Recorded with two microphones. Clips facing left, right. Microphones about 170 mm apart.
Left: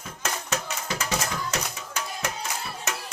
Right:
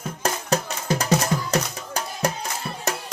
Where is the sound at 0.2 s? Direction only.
35° right (ahead or behind).